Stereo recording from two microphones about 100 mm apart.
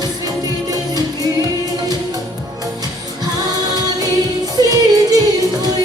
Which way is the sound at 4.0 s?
40° right (ahead or behind).